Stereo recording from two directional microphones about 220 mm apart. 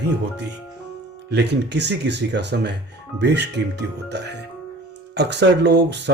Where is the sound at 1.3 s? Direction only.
50° right (ahead or behind).